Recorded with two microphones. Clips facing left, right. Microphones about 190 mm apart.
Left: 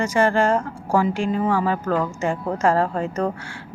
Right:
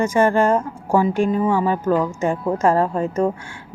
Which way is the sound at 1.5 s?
20° right (ahead or behind).